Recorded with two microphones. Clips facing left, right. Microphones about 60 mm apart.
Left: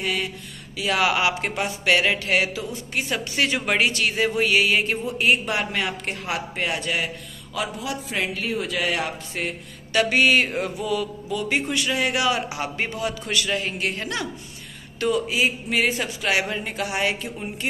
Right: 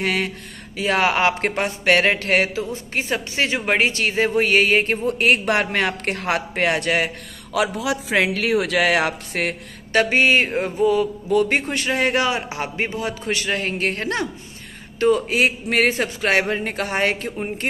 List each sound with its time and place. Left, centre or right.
0.0 s speech: right
0.7 s speech: right
5.0 s speech: right
7.5 s a man's voice: right
9.9 s speech: right
11.3 s speech: right
15.4 s speech: right
15.9 s speech: right